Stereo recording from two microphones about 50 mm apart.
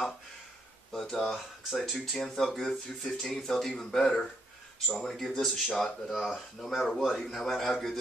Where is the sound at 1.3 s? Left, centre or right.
Centre.